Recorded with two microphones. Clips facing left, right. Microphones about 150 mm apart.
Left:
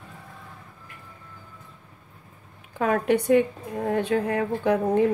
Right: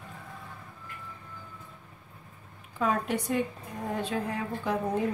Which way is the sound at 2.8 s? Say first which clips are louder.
Left 7 dB; 65° left (ahead or behind).